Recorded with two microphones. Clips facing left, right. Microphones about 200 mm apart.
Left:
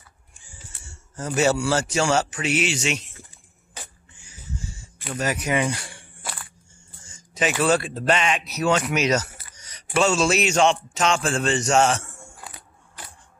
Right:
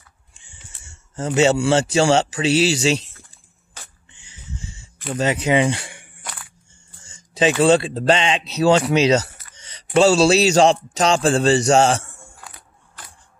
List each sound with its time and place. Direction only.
0.4 s speech: 25° right (ahead or behind)
3.2 s a sound: 15° left (ahead or behind)
5.1 s speech: 25° right (ahead or behind)
7.3 s speech: 30° right (ahead or behind)